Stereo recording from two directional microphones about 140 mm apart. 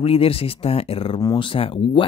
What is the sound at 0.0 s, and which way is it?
Speech, 45° left (ahead or behind).